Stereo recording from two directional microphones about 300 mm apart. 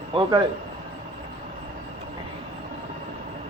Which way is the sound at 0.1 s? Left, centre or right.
Centre.